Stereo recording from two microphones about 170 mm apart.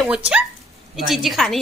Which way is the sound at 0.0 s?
5° right (ahead or behind).